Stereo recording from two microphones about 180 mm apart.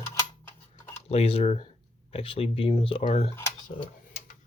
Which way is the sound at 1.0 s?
35° left (ahead or behind).